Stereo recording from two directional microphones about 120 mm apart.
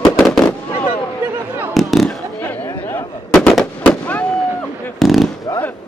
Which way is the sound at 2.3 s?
15° left (ahead or behind).